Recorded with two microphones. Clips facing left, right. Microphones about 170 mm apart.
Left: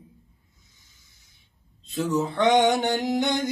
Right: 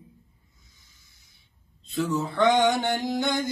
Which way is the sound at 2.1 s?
20° left (ahead or behind).